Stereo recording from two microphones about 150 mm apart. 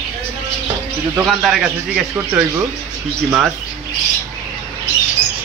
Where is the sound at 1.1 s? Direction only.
5° right (ahead or behind).